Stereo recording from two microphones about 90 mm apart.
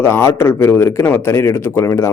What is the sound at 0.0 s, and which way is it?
Speech, 30° left (ahead or behind).